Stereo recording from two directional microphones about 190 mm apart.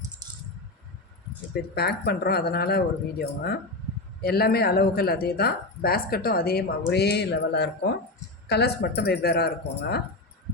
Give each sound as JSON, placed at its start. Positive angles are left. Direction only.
{"t": 1.7, "sound": "a woman's voice", "side_deg": 55}